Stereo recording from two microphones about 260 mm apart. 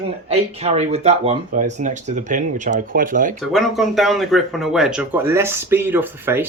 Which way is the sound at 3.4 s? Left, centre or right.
Centre.